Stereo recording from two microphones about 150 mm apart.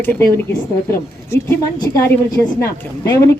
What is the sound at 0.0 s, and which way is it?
A woman's voice, 15° left (ahead or behind).